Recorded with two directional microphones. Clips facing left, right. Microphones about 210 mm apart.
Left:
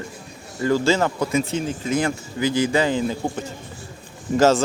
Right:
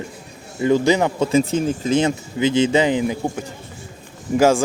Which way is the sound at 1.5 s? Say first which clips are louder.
Right 5 dB; 45° right (ahead or behind).